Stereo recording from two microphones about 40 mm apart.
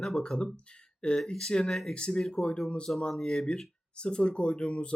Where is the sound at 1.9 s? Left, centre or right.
Left.